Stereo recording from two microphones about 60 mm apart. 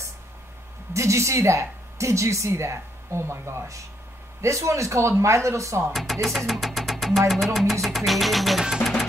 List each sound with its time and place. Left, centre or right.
0.9 s a woman's voice: right
6.2 s speech: centre
7.8 s music: centre